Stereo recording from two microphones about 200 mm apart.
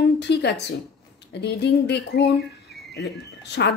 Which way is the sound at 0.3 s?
55° left (ahead or behind).